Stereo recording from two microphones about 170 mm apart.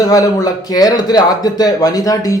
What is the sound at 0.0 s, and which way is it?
Speech, 20° left (ahead or behind).